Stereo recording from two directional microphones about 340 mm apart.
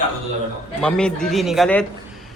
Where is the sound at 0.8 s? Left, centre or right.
Centre.